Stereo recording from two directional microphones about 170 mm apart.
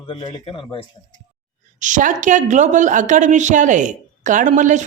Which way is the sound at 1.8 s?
50° right (ahead or behind).